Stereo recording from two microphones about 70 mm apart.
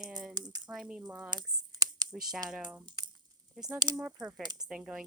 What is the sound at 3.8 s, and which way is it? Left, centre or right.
Speech, right.